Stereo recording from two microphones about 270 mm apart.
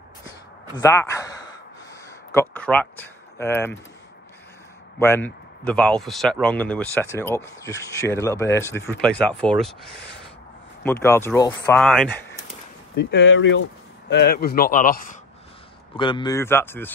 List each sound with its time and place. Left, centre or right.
0.7 s a man's voice: centre
4.9 s speech: centre
10.8 s speech: centre
12.9 s speech: left
16.0 s speech: centre